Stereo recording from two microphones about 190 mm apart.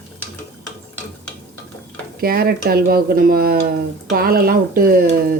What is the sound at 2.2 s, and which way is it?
Speech, 55° right (ahead or behind).